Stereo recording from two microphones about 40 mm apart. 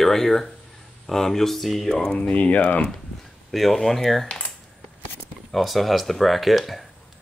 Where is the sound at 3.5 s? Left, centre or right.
Centre.